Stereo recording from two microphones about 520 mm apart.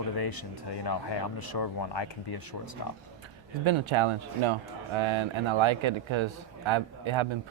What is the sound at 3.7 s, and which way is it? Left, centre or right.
A man's voice, right.